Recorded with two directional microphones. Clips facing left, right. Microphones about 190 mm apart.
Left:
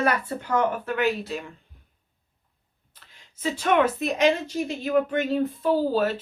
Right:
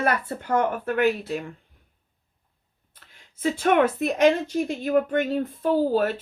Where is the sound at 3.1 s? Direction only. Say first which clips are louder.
Right 3 dB; 50° right (ahead or behind).